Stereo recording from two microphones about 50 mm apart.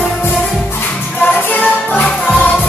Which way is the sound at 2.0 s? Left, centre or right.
Left.